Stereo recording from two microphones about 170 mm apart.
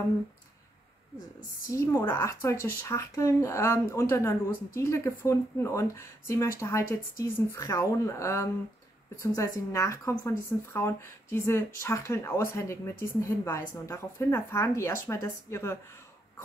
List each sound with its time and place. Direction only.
1.7 s a woman's voice: 15° left (ahead or behind)